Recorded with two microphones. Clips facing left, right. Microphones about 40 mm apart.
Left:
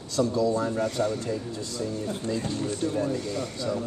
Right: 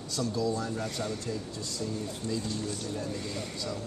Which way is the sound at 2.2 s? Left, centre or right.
Left.